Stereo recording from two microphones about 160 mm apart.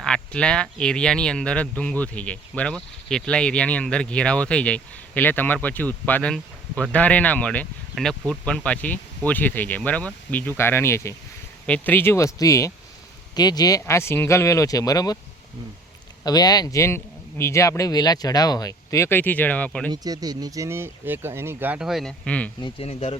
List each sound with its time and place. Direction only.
0.0 s a man's voice: 5° left (ahead or behind); by 15.2 s 20° left (ahead or behind)
16.2 s a man's voice: 25° left (ahead or behind); by 19.9 s 10° left (ahead or behind)
19.9 s speech: 25° right (ahead or behind); by 22.5 s 10° left (ahead or behind)
22.6 s speech: 40° left (ahead or behind)